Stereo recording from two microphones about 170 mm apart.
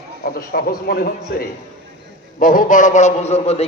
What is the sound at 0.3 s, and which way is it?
A man's voice, 65° left (ahead or behind).